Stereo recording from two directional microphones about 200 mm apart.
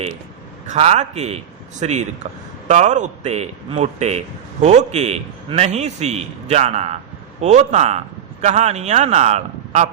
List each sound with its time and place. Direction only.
0.7 s speech: 35° right (ahead or behind)